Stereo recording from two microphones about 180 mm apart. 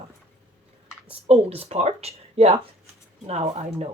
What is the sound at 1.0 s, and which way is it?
Speech, 35° right (ahead or behind).